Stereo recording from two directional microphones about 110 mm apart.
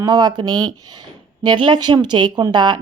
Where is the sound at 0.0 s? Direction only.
40° right (ahead or behind).